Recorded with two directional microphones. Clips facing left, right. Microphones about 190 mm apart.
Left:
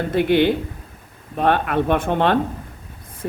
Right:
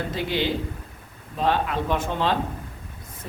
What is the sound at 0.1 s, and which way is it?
Speech, 60° left (ahead or behind).